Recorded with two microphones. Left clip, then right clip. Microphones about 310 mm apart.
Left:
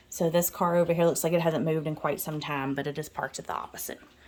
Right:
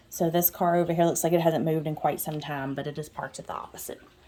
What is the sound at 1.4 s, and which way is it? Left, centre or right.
A woman's voice, left.